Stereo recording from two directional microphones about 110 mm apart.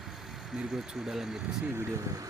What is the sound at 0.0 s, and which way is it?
Speech, centre (ahead or behind).